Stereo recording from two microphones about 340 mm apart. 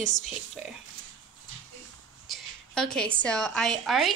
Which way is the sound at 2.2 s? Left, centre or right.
Centre.